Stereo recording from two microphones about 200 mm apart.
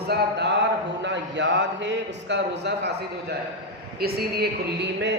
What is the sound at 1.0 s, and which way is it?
Speech, 65° right (ahead or behind).